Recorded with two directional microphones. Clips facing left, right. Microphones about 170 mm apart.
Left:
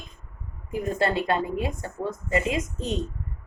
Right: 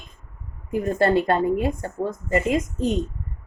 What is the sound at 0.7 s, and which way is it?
A woman's voice, 50° right (ahead or behind).